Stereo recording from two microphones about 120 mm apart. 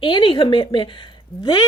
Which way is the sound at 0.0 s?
45° left (ahead or behind).